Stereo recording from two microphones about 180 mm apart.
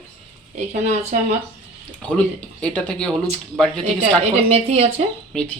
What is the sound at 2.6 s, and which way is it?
Speech, 5° left (ahead or behind).